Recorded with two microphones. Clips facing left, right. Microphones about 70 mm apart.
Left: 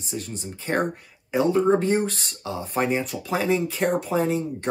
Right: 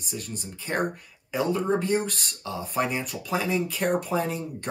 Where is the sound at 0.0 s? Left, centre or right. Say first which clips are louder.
Left 3 dB; left.